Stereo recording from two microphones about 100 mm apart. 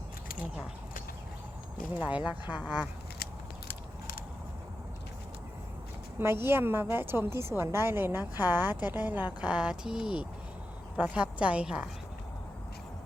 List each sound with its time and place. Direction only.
2.0 s speech: 15° right (ahead or behind)
6.1 s a woman's voice: 25° right (ahead or behind)